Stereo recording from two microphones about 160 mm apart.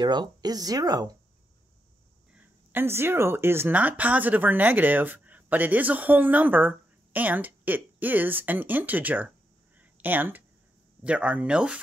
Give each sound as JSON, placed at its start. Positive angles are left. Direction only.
{"t": 0.0, "sound": "speech", "side_deg": -25}
{"t": 2.3, "sound": "speech", "side_deg": -15}
{"t": 9.8, "sound": "a sound", "side_deg": -10}
{"t": 11.1, "sound": "speech", "side_deg": -5}